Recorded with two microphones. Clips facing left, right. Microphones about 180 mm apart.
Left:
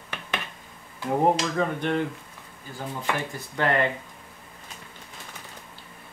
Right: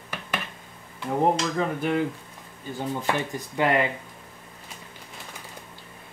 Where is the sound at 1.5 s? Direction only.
5° right (ahead or behind).